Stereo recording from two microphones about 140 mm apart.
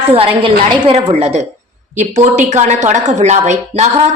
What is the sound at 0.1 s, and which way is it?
A woman's voice, 45° right (ahead or behind).